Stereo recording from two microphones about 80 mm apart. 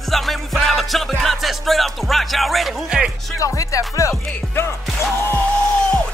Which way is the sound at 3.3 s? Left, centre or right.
Left.